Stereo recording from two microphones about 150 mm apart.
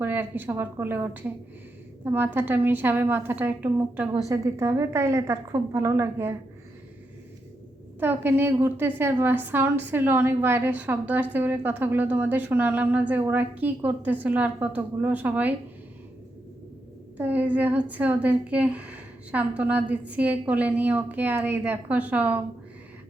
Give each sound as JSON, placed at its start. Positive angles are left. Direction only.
{"t": 0.0, "sound": "a woman's voice", "side_deg": -15}
{"t": 4.3, "sound": "a woman's voice", "side_deg": -20}
{"t": 7.9, "sound": "a woman's voice", "side_deg": -15}
{"t": 17.2, "sound": "a woman's voice", "side_deg": -10}